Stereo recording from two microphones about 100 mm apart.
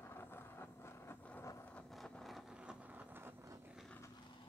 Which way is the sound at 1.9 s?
5° left (ahead or behind).